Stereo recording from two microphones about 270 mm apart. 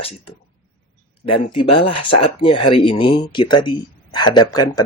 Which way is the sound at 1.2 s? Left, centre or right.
Centre.